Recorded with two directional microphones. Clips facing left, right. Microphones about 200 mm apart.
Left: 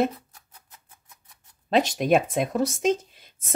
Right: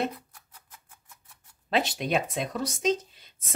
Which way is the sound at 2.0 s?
50° left (ahead or behind).